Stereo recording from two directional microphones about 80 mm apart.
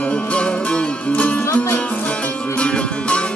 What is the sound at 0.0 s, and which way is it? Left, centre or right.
Music, centre.